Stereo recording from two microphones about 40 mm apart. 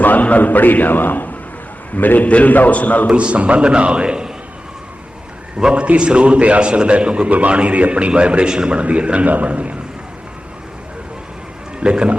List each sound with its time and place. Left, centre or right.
0.0 s a man's voice: left
3.1 s a man's voice: right
5.5 s a man's voice: right
7.3 s a man's voice: right
8.8 s a man's voice: right
11.8 s a man's voice: right